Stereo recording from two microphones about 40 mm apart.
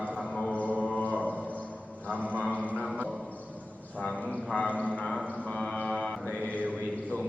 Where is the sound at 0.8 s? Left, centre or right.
Left.